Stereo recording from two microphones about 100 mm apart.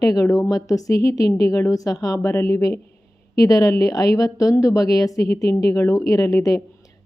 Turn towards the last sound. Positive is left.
turn(degrees=35)  # may be behind; listen again after turning